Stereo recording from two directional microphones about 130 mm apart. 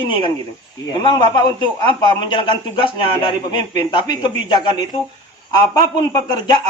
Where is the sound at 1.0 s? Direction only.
35° left (ahead or behind).